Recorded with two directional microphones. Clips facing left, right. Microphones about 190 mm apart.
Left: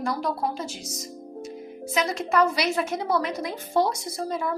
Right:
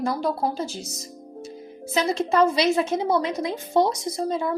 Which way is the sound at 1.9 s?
30° right (ahead or behind).